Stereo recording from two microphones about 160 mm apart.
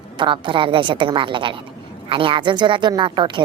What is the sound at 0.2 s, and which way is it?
A woman's voice, 30° right (ahead or behind).